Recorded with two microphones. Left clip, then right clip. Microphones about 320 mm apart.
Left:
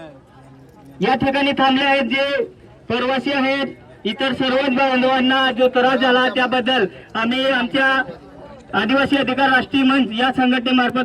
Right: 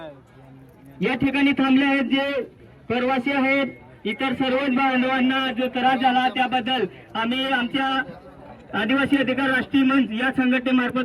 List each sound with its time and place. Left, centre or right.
1.0 s a man's voice: centre